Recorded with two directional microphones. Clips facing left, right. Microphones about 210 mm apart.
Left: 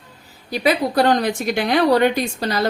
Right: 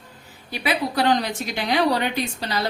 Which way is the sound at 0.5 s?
40° left (ahead or behind).